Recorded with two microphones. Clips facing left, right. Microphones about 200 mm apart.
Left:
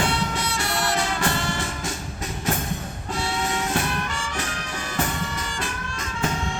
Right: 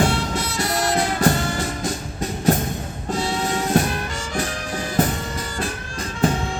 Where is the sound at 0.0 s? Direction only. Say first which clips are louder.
Right 4 dB; 40° right (ahead or behind).